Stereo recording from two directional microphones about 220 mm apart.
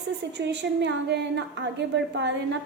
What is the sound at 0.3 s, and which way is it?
A woman's voice, 50° right (ahead or behind).